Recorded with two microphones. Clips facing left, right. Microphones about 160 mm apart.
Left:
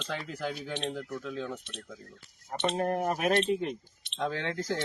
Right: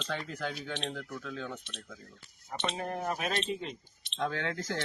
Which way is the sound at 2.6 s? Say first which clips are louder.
Left 6 dB; 55° left (ahead or behind).